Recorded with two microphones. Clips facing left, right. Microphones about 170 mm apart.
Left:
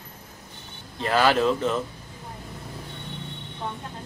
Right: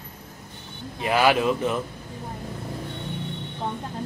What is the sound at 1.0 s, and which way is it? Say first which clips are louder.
Speech: even; 15° right (ahead or behind).